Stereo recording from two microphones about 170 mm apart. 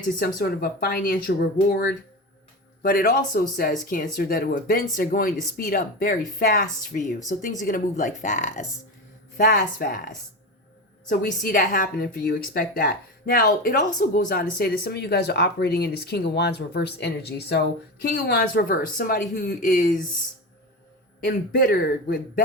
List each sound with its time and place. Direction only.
0.2 s a woman's voice: 60° left (ahead or behind)
2.8 s a woman's voice: 60° left (ahead or behind)
11.1 s a woman's voice: 55° left (ahead or behind)
21.2 s a woman's voice: 65° left (ahead or behind)